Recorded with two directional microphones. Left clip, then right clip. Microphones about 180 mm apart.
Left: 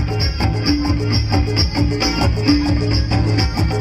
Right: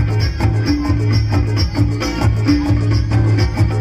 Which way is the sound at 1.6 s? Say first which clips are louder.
Left 2 dB; 25° left (ahead or behind).